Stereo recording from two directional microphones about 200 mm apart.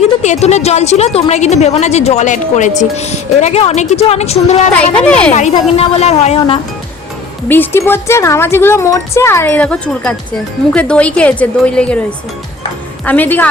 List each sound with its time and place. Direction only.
0.0 s a woman's voice: 35° left (ahead or behind)
4.7 s a woman's voice: 5° left (ahead or behind)
5.3 s a woman's voice: 35° left (ahead or behind)
7.4 s a woman's voice: 10° left (ahead or behind)
13.1 s speech: 10° left (ahead or behind)